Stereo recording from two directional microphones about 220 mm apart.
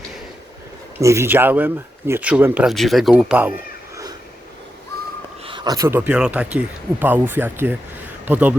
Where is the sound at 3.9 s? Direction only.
15° right (ahead or behind).